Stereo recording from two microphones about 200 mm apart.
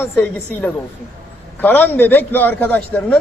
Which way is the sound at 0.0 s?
10° left (ahead or behind).